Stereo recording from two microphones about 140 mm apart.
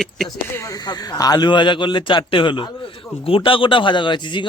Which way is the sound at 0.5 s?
25° left (ahead or behind).